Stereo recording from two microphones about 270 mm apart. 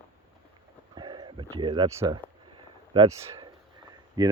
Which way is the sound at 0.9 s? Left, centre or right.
Centre.